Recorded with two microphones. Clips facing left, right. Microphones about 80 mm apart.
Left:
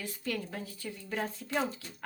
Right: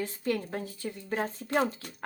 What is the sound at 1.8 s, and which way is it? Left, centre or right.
Speech, right.